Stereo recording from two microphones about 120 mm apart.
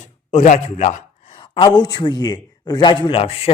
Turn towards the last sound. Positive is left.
turn(degrees=55)  # may be behind; listen again after turning